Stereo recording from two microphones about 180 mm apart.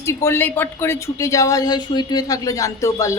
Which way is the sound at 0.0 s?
15° left (ahead or behind).